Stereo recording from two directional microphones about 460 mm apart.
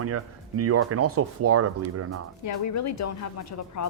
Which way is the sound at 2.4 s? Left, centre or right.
Left.